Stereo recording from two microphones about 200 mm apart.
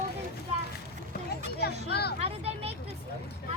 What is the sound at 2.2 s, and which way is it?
Speech, 30° right (ahead or behind).